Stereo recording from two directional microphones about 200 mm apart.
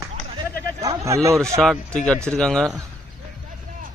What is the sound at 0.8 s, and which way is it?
Speech, 15° right (ahead or behind).